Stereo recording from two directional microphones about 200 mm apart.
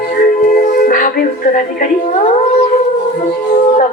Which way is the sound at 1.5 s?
40° left (ahead or behind).